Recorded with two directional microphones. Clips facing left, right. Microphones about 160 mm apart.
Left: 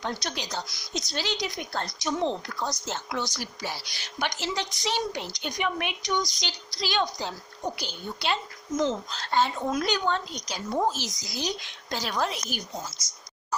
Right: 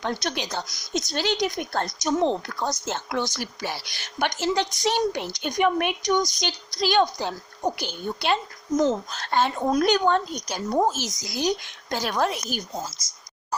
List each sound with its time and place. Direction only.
0.0 s a woman's voice: 60° right (ahead or behind)
8.7 s a woman's voice: 45° right (ahead or behind)
9.6 s a woman's voice: 45° right (ahead or behind)